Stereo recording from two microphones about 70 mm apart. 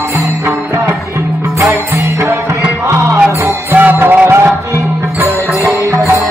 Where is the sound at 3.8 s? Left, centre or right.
Right.